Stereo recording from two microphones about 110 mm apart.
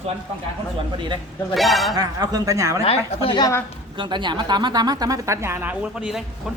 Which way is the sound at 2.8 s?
60° left (ahead or behind).